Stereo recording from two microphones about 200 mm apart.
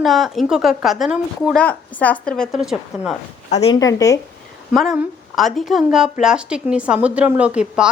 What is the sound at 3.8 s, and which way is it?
Speech, 15° left (ahead or behind).